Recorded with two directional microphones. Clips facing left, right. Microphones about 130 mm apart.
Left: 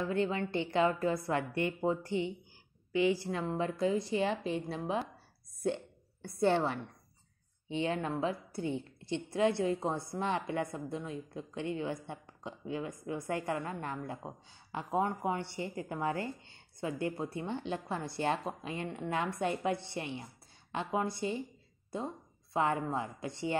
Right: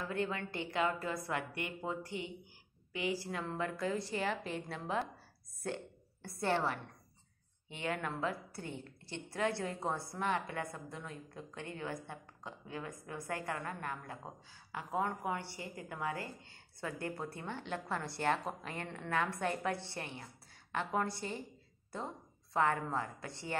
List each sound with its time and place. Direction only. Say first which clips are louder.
0.1 s a woman's voice: left 4 dB; 25° left (ahead or behind)
6.2 s a woman's voice: left 5 dB; 20° left (ahead or behind)